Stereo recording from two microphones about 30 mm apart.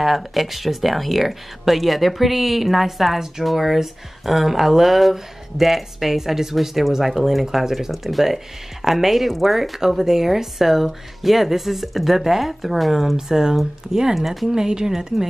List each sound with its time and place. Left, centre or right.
0.0 s speech: centre
14.1 s speech: centre
14.5 s speech: right